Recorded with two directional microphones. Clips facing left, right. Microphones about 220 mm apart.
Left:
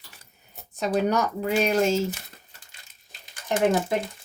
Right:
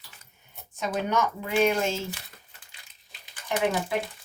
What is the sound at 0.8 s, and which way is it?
Speech, 35° left (ahead or behind).